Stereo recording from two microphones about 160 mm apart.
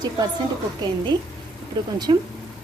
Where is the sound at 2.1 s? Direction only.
30° right (ahead or behind).